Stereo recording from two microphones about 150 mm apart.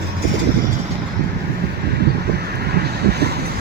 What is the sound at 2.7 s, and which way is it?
Vehicle, 90° right.